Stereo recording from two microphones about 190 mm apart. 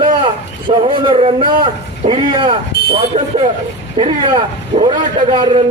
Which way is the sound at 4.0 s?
25° right (ahead or behind).